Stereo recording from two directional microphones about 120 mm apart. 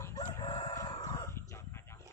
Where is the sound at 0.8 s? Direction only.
30° left (ahead or behind).